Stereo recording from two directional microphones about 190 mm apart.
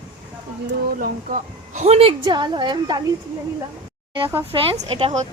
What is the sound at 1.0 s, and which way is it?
A woman's voice, 45° right (ahead or behind).